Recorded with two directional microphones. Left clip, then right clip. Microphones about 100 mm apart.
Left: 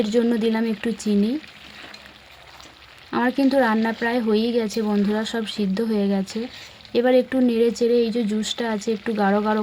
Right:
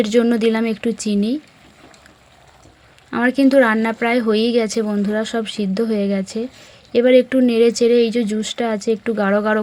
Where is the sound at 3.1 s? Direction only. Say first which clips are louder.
Right 5 dB; 25° right (ahead or behind).